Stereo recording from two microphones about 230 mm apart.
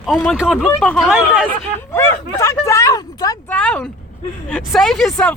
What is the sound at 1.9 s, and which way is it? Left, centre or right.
Speech, centre.